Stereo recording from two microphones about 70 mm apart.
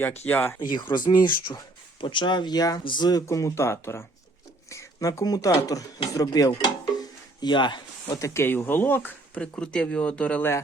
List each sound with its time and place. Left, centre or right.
0.0 s speech: left
0.6 s speech: left
3.2 s speech: left
7.4 s speech: left
8.2 s speech: left
8.4 s speech: left
9.4 s speech: centre